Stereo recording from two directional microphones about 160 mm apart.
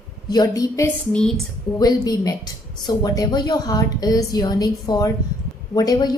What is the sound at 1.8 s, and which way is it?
A woman's voice, 25° left (ahead or behind).